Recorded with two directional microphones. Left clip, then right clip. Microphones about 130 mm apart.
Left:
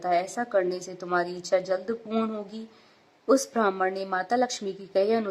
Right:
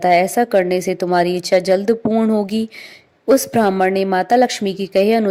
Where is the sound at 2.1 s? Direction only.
30° right (ahead or behind).